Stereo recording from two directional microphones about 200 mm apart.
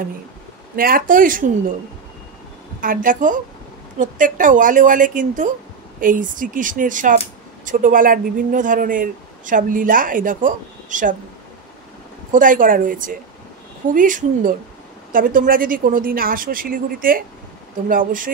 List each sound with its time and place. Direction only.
0.7 s speech: 45° right (ahead or behind)
2.8 s speech: 45° right (ahead or behind)
12.3 s speech: 40° right (ahead or behind)